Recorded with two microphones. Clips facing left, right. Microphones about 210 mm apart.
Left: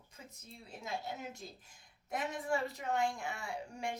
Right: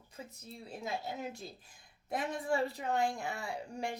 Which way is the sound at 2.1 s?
30° right (ahead or behind).